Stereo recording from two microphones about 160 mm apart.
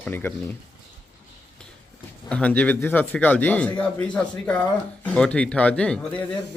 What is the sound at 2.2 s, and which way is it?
Speech, 10° left (ahead or behind).